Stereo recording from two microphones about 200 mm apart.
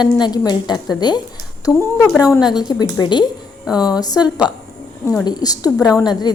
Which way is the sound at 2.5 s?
20° left (ahead or behind).